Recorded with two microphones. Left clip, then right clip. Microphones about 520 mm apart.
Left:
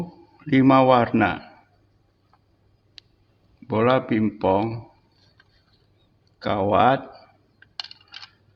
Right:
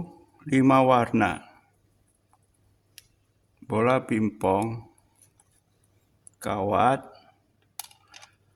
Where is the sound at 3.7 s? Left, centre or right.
Right.